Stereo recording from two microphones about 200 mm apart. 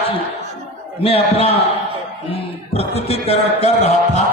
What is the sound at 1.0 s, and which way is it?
A man's voice, 30° left (ahead or behind).